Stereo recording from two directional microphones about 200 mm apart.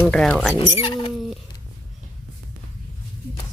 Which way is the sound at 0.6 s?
25° left (ahead or behind).